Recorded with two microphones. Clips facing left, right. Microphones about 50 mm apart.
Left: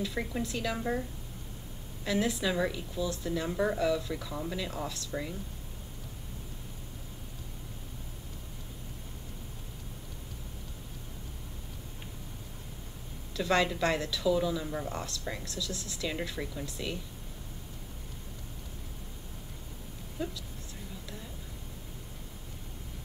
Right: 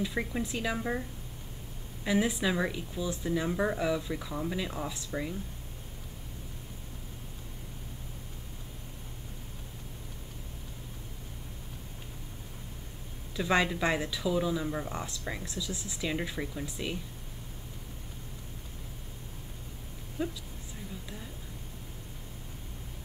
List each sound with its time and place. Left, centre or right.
0.0 s speech: centre
2.0 s speech: centre
13.4 s speech: centre
20.2 s speech: right